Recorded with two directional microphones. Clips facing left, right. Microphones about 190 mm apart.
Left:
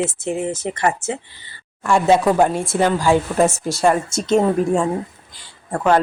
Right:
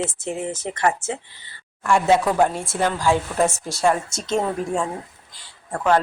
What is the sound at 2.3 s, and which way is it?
Speech, 15° left (ahead or behind).